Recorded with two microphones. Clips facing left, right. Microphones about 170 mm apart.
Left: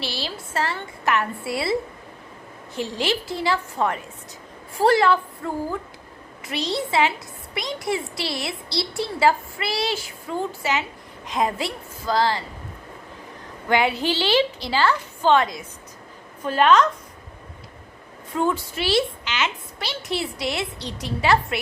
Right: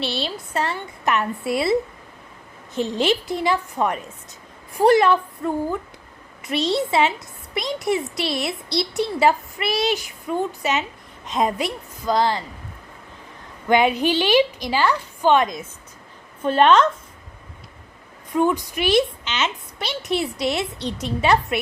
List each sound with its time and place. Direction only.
0.0 s speech: 20° right (ahead or behind)
2.7 s speech: 20° right (ahead or behind)
13.7 s a woman's voice: 20° right (ahead or behind)
18.3 s speech: 15° right (ahead or behind)